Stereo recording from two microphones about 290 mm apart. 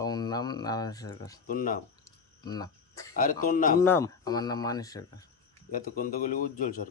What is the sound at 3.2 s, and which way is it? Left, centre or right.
Speech, left.